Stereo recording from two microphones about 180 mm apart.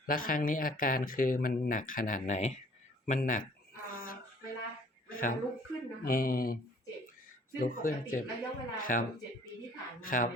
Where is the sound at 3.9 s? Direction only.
50° left (ahead or behind).